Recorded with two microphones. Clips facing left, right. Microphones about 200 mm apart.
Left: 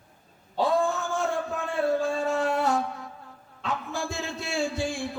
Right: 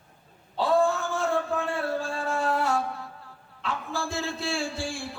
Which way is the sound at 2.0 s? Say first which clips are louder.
Left 3 dB; 20° left (ahead or behind).